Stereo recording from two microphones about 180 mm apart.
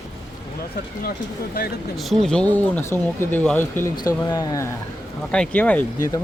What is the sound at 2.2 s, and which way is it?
Speech, 5° left (ahead or behind).